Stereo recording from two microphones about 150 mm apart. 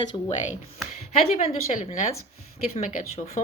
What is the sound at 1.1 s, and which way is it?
Speech, 45° left (ahead or behind).